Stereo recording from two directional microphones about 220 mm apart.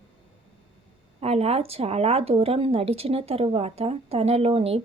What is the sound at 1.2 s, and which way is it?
A woman's voice, 25° right (ahead or behind).